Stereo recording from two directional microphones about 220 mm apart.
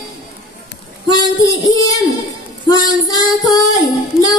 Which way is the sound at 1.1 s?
15° left (ahead or behind).